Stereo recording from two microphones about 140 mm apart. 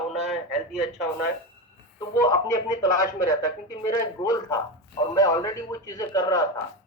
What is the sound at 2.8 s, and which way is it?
A man's voice, 25° left (ahead or behind).